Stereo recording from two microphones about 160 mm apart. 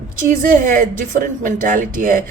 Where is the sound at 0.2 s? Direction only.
55° right (ahead or behind).